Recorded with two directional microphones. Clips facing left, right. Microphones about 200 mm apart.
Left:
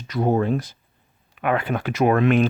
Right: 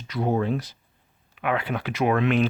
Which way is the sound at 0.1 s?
45° left (ahead or behind).